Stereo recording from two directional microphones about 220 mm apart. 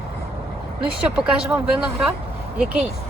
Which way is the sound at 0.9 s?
5° right (ahead or behind).